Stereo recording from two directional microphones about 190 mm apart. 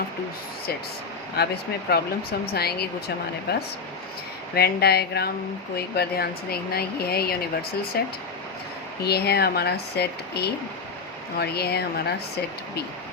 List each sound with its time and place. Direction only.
1.4 s speech: 60° left (ahead or behind)
9.0 s speech: 55° left (ahead or behind)